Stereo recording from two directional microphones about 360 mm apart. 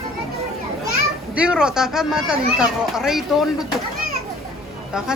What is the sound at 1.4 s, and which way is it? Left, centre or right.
Speech, centre.